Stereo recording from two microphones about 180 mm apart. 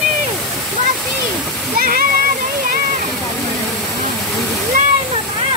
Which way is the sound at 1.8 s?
55° right (ahead or behind).